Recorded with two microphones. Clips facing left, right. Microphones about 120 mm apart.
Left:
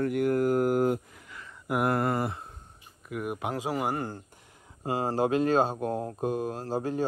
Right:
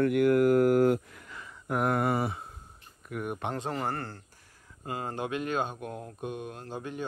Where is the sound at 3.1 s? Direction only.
Centre (ahead or behind).